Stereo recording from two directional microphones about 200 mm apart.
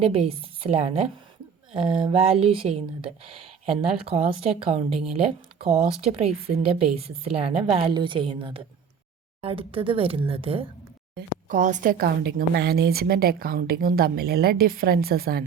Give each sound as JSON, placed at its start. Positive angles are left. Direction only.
{"t": 0.0, "sound": "a woman's voice", "side_deg": -30}
{"t": 11.2, "sound": "a woman's voice", "side_deg": -40}